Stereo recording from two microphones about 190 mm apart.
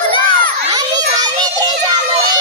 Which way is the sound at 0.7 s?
20° right (ahead or behind).